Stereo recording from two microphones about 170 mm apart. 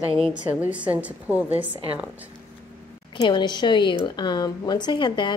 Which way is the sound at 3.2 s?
25° left (ahead or behind).